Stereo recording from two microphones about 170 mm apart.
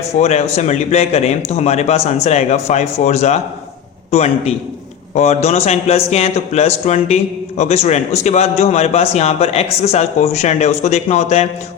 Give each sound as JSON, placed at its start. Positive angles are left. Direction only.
{"t": 0.2, "sound": "a man's voice", "side_deg": 40}